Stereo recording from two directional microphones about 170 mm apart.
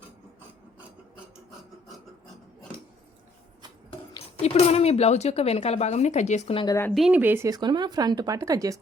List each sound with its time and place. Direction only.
4.1 s a woman's voice: 35° left (ahead or behind)
6.9 s speech: 5° right (ahead or behind)